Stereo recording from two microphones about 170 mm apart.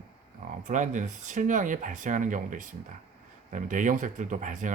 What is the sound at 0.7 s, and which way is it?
Speech, 45° right (ahead or behind).